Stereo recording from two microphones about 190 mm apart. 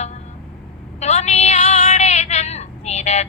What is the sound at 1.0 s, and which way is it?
Female singing, 35° left (ahead or behind).